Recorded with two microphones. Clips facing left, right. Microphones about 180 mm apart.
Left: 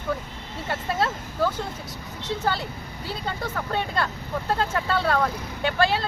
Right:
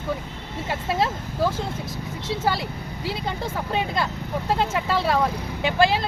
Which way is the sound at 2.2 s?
10° right (ahead or behind).